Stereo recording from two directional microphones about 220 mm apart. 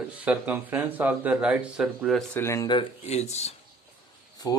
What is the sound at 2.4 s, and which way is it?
Speech, 15° left (ahead or behind).